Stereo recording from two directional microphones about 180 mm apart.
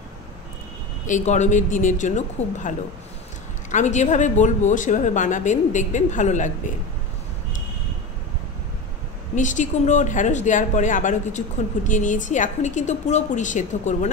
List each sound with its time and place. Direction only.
1.0 s speech: 40° left (ahead or behind)
3.7 s speech: 40° left (ahead or behind)
9.3 s speech: 45° left (ahead or behind)